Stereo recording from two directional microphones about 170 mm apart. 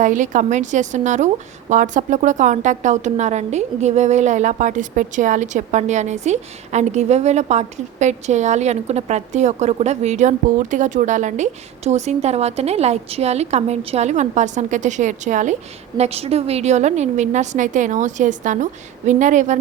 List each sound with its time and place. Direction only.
0.0 s a woman's voice: 45° right (ahead or behind)
16.0 s a woman's voice: 35° right (ahead or behind)